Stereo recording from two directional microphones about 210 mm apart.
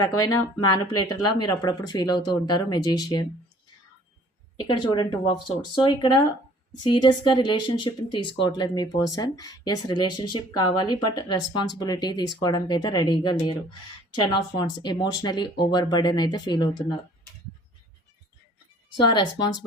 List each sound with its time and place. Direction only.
0.6 s speech: 20° left (ahead or behind)
4.6 s speech: 20° left (ahead or behind)
18.9 s speech: 20° left (ahead or behind)